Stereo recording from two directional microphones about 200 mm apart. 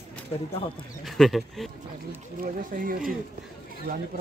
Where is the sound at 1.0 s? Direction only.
Centre (ahead or behind).